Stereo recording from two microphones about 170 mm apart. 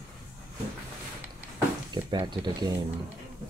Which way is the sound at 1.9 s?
25° right (ahead or behind).